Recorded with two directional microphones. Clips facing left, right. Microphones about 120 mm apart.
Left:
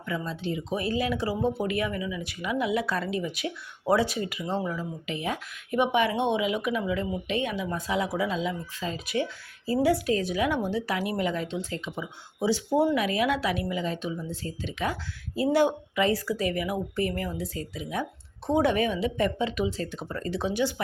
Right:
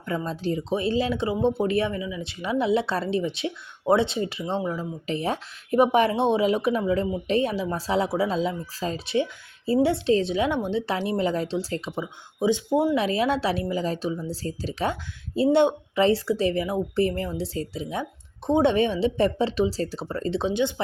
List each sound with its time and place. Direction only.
0.1 s speech: 40° right (ahead or behind)
0.7 s speech: 25° right (ahead or behind)
9.1 s speech: 25° right (ahead or behind)
12.4 s speech: 20° right (ahead or behind)